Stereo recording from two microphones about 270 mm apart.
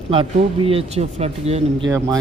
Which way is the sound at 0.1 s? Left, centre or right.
Centre.